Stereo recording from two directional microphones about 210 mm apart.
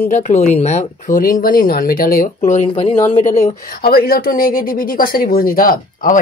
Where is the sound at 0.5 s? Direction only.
35° left (ahead or behind).